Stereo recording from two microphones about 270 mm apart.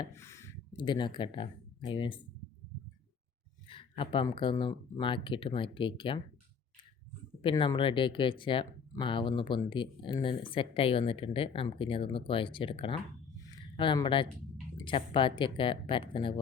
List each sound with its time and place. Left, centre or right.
0.0 s speech: centre
3.7 s speech: centre
7.4 s speech: centre
13.4 s a sound: centre
14.8 s speech: centre